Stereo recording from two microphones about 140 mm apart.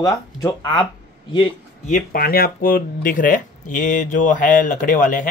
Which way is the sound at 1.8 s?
80° left.